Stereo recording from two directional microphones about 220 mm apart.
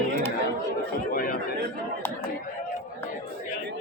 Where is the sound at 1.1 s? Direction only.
40° left (ahead or behind).